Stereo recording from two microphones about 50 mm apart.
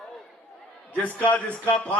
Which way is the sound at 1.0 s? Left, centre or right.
Left.